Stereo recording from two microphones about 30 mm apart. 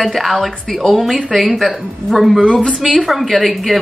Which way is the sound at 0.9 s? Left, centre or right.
Centre.